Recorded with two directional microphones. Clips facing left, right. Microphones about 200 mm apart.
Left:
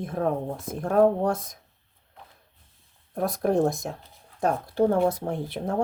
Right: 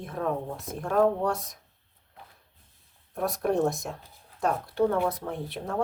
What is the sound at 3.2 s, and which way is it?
Speech, 35° left (ahead or behind).